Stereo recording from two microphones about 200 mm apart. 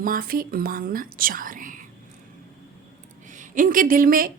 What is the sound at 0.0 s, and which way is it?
A woman's voice, 45° right (ahead or behind).